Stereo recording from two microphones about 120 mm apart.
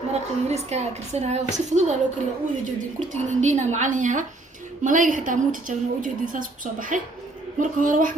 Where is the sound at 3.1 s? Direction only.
90° right.